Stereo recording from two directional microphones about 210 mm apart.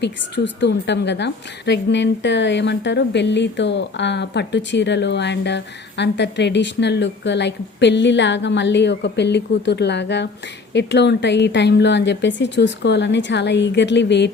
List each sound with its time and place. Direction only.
0.0 s a woman's voice: 55° left (ahead or behind)